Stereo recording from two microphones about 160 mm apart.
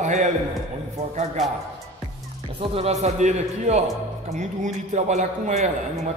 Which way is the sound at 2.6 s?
40° right (ahead or behind).